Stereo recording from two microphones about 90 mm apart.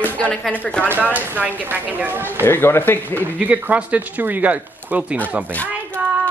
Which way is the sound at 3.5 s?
15° right (ahead or behind).